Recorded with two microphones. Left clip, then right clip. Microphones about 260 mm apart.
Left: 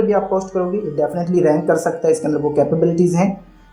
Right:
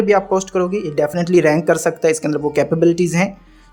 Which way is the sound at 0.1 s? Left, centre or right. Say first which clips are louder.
Right 2 dB; right.